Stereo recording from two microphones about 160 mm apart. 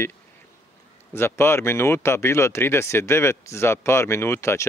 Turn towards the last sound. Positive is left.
turn(degrees=15)  # may be behind; listen again after turning